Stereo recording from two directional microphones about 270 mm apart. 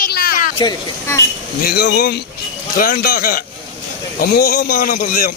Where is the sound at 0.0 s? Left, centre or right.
Left.